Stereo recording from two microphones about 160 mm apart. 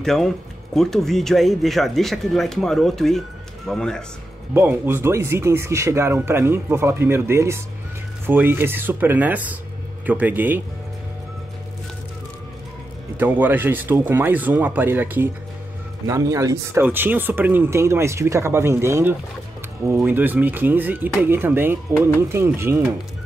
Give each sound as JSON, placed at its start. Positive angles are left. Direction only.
{"t": 0.0, "sound": "speech", "side_deg": 0}
{"t": 4.6, "sound": "speech", "side_deg": -15}
{"t": 13.2, "sound": "speech", "side_deg": -10}